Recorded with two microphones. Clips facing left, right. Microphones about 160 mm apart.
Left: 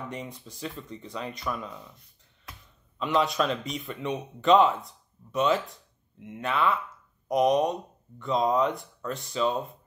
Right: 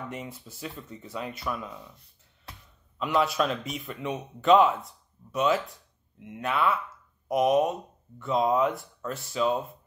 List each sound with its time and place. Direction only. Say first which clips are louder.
0.1 s a man's voice: even; 5° right (ahead or behind)
2.5 s a sound: even; 30° right (ahead or behind)
3.0 s a man's voice: even; centre (ahead or behind)